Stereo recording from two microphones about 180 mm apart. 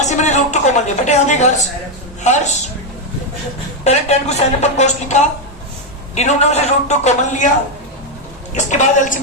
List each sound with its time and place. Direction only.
0.0 s a woman's voice: 40° left (ahead or behind)
3.8 s a woman's voice: 40° left (ahead or behind)
8.5 s a woman's voice: 40° left (ahead or behind)